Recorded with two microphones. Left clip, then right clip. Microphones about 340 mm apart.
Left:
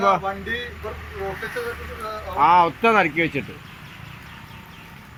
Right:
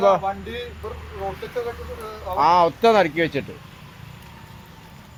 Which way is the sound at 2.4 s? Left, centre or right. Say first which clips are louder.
Left 1 dB; right.